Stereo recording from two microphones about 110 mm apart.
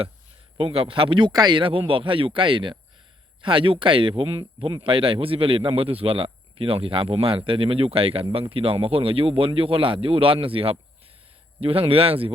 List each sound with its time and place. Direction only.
0.5 s a man's voice: 55° right (ahead or behind)